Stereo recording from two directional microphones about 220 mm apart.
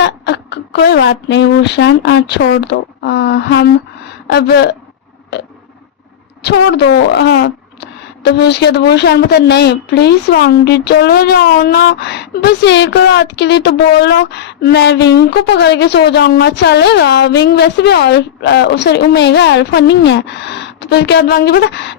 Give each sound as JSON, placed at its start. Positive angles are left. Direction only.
{"t": 0.0, "sound": "a woman's voice", "side_deg": 50}
{"t": 6.4, "sound": "a woman's voice", "side_deg": 50}